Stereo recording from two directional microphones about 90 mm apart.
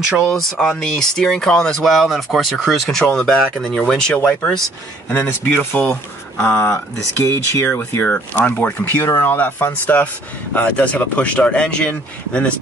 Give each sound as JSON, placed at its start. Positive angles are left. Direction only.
{"t": 0.3, "sound": "speech", "side_deg": 5}